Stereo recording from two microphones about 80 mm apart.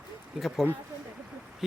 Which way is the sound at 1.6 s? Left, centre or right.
Centre.